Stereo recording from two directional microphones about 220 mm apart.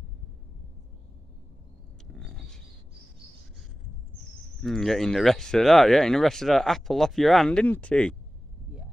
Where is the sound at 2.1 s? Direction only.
Centre (ahead or behind).